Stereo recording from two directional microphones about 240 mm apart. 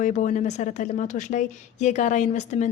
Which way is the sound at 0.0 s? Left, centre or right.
Left.